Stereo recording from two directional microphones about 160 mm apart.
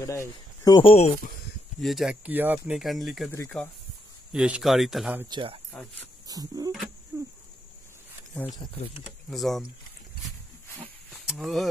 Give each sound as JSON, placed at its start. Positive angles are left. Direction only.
{"t": 0.0, "sound": "speech", "side_deg": 20}
{"t": 1.8, "sound": "speech", "side_deg": 0}
{"t": 4.3, "sound": "speech", "side_deg": -5}
{"t": 5.3, "sound": "speech", "side_deg": -35}
{"t": 6.2, "sound": "a sound", "side_deg": -25}
{"t": 7.1, "sound": "insect", "side_deg": -20}
{"t": 8.5, "sound": "speech", "side_deg": 30}
{"t": 9.3, "sound": "speech", "side_deg": 0}
{"t": 10.8, "sound": "a sound", "side_deg": 0}